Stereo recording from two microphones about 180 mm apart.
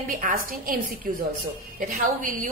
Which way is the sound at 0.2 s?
50° right (ahead or behind).